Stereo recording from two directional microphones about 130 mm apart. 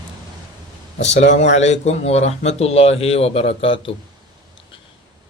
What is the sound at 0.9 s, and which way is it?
Speech, 60° left (ahead or behind).